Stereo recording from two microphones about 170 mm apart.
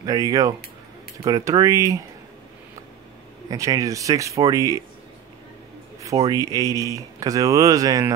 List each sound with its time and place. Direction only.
0.0 s speech: 20° right (ahead or behind)
3.4 s speech: 20° right (ahead or behind)
6.3 s speech: 20° right (ahead or behind)